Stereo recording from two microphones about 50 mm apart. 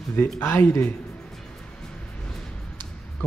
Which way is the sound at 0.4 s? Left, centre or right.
Left.